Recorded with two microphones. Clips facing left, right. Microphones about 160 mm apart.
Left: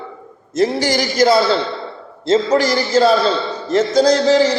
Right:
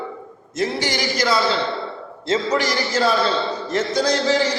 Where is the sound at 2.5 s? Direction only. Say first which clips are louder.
Left 6 dB; 35° left (ahead or behind).